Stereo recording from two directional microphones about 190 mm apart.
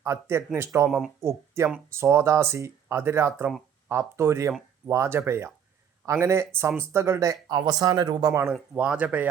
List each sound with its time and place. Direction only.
0.0 s speech: 15° right (ahead or behind)
0.9 s speech: centre (ahead or behind)
1.2 s speech: 15° right (ahead or behind)